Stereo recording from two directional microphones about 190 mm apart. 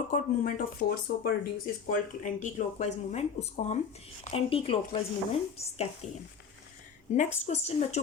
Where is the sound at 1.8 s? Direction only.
45° left (ahead or behind).